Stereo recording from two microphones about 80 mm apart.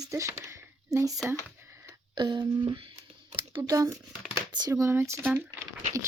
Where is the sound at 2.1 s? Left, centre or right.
Right.